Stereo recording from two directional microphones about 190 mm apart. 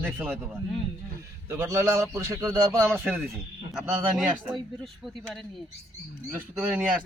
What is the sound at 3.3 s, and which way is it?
Speech, centre (ahead or behind).